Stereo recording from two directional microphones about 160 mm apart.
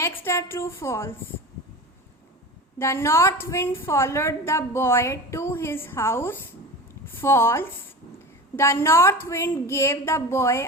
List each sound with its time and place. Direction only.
0.0 s a woman's voice: 15° left (ahead or behind)
2.7 s a woman's voice: 15° left (ahead or behind)